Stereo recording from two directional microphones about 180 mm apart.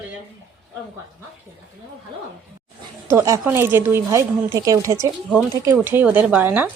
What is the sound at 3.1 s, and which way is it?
A woman's voice, 15° right (ahead or behind).